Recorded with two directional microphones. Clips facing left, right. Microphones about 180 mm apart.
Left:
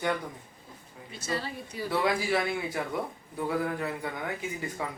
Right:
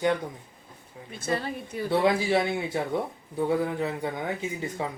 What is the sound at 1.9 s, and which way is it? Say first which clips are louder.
A man's voice: right 4 dB; 25° right (ahead or behind).